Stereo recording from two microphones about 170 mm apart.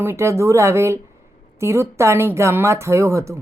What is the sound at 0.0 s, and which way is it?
Speech, 15° right (ahead or behind).